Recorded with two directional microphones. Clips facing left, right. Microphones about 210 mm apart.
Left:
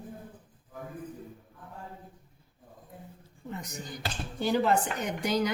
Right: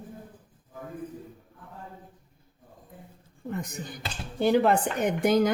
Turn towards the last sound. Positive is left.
turn(degrees=-50)  # may be behind; listen again after turning